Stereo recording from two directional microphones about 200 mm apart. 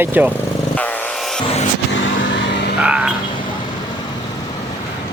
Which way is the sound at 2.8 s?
5° right (ahead or behind).